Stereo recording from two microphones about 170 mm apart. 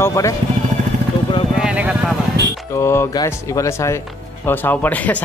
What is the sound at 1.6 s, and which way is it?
Speech, 5° right (ahead or behind).